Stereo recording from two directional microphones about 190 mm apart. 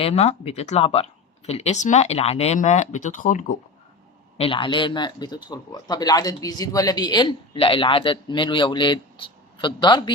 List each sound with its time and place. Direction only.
0.0 s speech: 35° left (ahead or behind)
4.4 s a man's voice: 30° left (ahead or behind)